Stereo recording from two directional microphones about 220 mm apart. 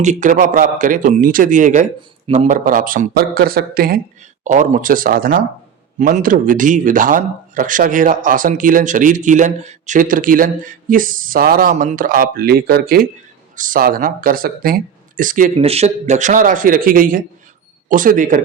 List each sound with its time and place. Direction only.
0.0 s speech: 35° right (ahead or behind)